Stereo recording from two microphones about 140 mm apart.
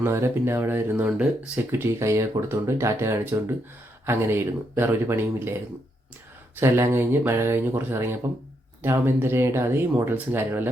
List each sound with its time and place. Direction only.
0.0 s speech: 20° right (ahead or behind)
6.6 s speech: 20° right (ahead or behind)